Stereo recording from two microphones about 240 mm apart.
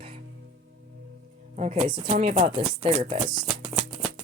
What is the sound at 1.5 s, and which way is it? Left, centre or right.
Speech, right.